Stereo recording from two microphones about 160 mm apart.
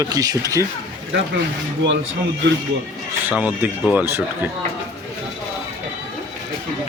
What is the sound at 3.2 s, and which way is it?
Speech, 10° right (ahead or behind).